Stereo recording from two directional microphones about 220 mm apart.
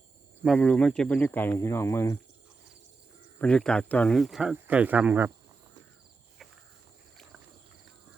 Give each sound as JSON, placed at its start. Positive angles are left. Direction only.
{"t": 0.4, "sound": "speech", "side_deg": 5}
{"t": 3.3, "sound": "speech", "side_deg": 5}